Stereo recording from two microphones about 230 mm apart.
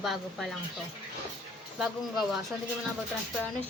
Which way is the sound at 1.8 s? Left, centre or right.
Centre.